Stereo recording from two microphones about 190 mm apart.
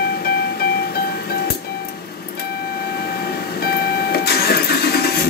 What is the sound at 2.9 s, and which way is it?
Vehicle, 55° left (ahead or behind).